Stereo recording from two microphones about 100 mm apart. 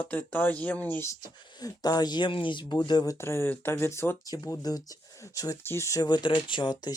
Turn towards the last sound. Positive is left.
turn(degrees=45)  # may be behind; listen again after turning